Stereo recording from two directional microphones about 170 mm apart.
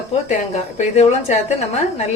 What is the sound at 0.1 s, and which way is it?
A woman's voice, 40° left (ahead or behind).